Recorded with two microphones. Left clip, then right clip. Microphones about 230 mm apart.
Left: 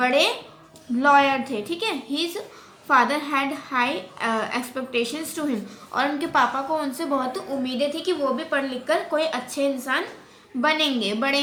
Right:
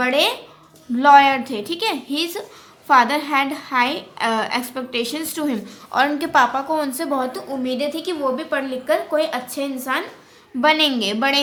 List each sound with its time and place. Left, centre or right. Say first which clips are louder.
0.0 s music: right 2 dB; right
0.9 s a woman's voice: right 6 dB; right